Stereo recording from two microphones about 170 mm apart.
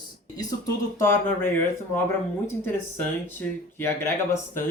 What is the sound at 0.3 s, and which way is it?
Speech, 15° left (ahead or behind).